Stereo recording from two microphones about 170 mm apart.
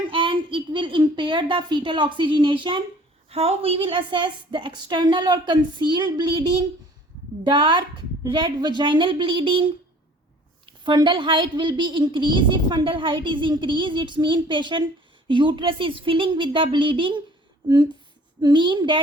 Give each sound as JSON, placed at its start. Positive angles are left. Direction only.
{"t": 0.1, "sound": "a woman's voice", "side_deg": -30}
{"t": 10.8, "sound": "a woman's voice", "side_deg": -25}